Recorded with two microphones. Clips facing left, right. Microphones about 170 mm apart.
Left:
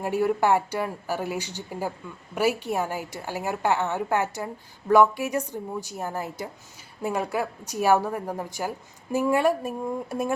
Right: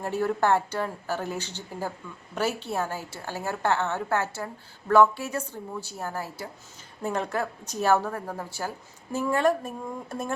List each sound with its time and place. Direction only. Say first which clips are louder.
0.0 s a woman's voice: left 2 dB; 10° left (ahead or behind)